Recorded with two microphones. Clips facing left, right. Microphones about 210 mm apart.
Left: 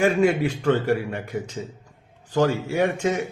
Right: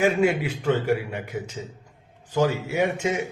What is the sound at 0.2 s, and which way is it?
A man's voice, 10° right (ahead or behind).